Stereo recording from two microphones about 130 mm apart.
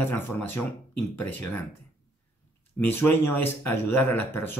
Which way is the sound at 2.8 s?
15° left (ahead or behind).